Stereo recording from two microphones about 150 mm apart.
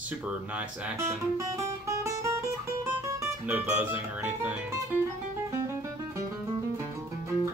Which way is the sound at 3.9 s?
10° right (ahead or behind).